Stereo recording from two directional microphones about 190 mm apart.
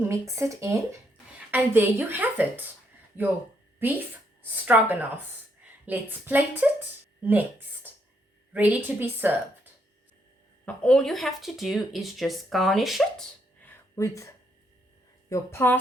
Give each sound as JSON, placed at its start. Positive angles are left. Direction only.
{"t": 0.1, "sound": "speech", "side_deg": -15}
{"t": 3.8, "sound": "speech", "side_deg": -10}
{"t": 8.5, "sound": "speech", "side_deg": -10}
{"t": 10.7, "sound": "speech", "side_deg": 5}
{"t": 13.7, "sound": "a sound", "side_deg": 15}
{"t": 15.3, "sound": "speech", "side_deg": 15}